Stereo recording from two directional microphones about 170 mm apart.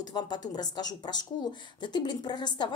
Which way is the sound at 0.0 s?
25° left (ahead or behind).